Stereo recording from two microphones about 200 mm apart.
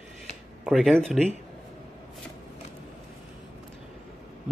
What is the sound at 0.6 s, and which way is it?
Speech, centre (ahead or behind).